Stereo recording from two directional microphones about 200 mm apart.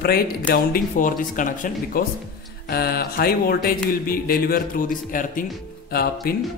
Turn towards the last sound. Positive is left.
turn(degrees=50)  # may be behind; listen again after turning